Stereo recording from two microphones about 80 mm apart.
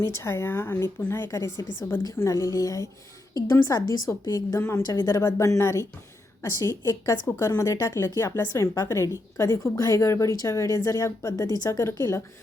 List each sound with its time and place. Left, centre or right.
0.0 s a woman's voice: left
11.9 s a woman's voice: left